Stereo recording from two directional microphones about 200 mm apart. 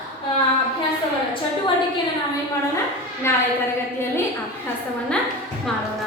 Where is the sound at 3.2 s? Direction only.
10° left (ahead or behind).